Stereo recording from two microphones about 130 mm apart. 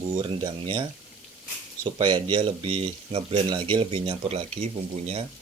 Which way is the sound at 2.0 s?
35° right (ahead or behind).